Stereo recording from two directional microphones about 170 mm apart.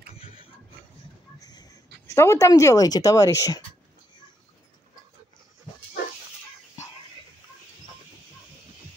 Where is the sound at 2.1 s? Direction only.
15° left (ahead or behind).